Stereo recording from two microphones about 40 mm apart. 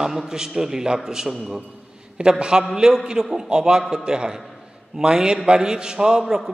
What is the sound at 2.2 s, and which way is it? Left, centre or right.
Speech, right.